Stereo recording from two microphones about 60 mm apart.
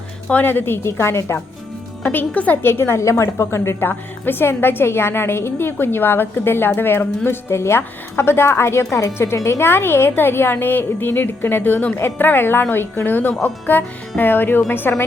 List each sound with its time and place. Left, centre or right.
0.4 s a woman's voice: left
2.0 s a woman's voice: left
2.6 s a woman's voice: left
3.0 s a woman's voice: left
9.1 s a woman's voice: left
11.9 s a woman's voice: left